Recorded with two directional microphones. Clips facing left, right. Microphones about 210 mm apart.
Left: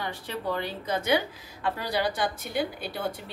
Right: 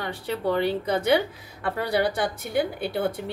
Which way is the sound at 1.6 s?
60° right (ahead or behind).